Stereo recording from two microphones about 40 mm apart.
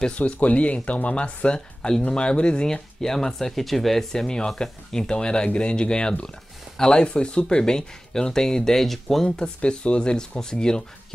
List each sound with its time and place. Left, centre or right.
0.2 s speech: left
1.8 s speech: centre
9.4 s speech: left